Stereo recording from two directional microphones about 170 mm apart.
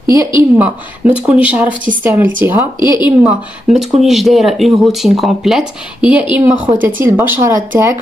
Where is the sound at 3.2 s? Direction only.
Centre (ahead or behind).